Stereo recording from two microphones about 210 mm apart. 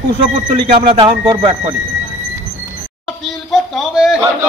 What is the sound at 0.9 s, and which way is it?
Speech, 25° right (ahead or behind).